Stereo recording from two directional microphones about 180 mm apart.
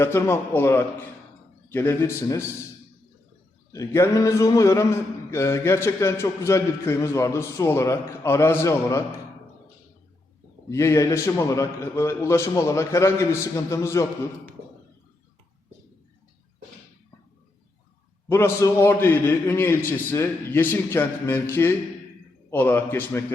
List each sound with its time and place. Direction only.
0.0 s a man's voice: 15° left (ahead or behind)
3.7 s a man's voice: 20° left (ahead or behind)
10.7 s a man's voice: 15° left (ahead or behind)
18.3 s a man's voice: 15° left (ahead or behind)